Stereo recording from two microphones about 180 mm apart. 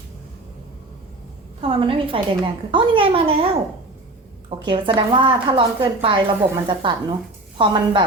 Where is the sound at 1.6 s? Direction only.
30° right (ahead or behind).